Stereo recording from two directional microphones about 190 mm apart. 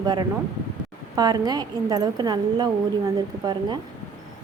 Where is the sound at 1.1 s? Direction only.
20° right (ahead or behind).